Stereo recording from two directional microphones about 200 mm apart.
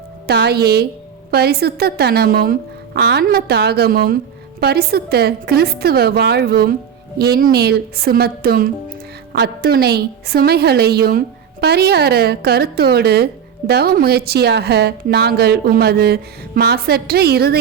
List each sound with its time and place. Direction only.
0.3 s a woman's voice: 55° right (ahead or behind)